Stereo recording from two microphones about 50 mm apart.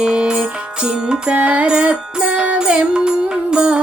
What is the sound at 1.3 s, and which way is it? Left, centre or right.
Music, right.